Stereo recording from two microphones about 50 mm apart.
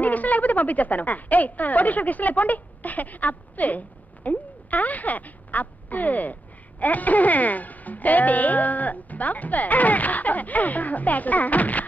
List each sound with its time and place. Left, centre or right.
0.0 s a woman's voice: left